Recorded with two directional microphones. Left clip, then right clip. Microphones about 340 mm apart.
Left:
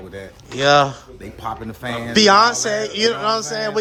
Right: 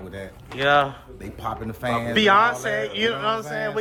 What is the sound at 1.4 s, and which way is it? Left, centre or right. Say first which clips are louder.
Speech: left 1 dB; centre.